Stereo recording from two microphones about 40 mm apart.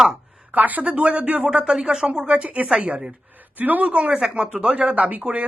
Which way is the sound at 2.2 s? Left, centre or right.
Right.